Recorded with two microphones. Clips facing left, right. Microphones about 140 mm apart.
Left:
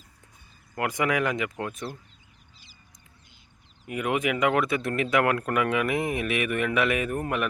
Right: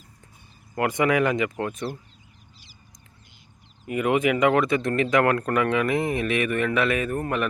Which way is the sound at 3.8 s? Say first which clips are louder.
Right 5 dB; centre (ahead or behind).